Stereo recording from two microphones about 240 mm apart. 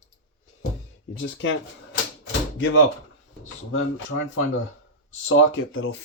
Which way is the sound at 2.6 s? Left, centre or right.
Left.